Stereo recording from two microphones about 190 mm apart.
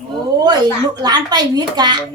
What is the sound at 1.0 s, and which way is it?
A woman's voice, 20° right (ahead or behind).